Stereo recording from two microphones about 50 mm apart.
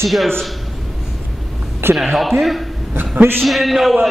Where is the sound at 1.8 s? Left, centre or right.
Right.